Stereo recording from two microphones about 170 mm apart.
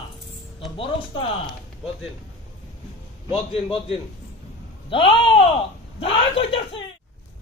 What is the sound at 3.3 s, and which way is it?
Speech, 35° left (ahead or behind).